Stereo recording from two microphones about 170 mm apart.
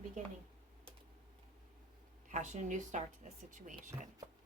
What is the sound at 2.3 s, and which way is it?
Speech, 45° right (ahead or behind).